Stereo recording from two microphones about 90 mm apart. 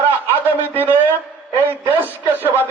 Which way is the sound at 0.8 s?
20° right (ahead or behind).